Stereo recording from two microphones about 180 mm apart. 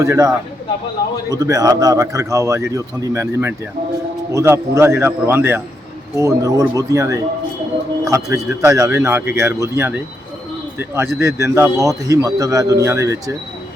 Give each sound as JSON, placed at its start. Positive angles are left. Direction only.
{"t": 0.0, "sound": "a man's voice", "side_deg": -20}